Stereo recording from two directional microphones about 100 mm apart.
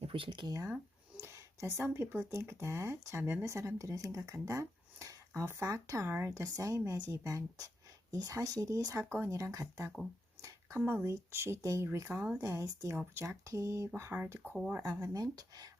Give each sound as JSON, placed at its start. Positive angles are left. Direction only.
{"t": 0.0, "sound": "speech", "side_deg": -60}
{"t": 1.1, "sound": "speech", "side_deg": -30}
{"t": 14.8, "sound": "speech", "side_deg": -40}